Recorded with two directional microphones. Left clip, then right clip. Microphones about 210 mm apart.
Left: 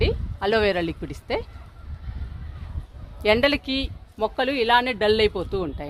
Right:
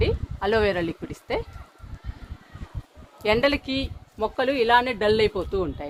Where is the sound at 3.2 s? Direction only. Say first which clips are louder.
Left 2 dB; 50° left (ahead or behind).